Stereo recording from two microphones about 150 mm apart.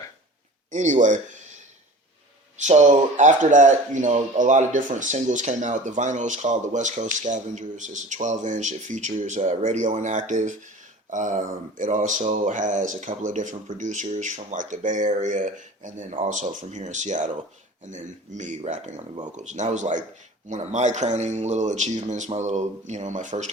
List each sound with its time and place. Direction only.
0.7 s speech: 55° right (ahead or behind)
2.6 s a man's voice: 50° right (ahead or behind)